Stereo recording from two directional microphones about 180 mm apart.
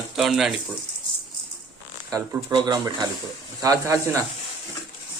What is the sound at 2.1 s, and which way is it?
Speech, 25° right (ahead or behind).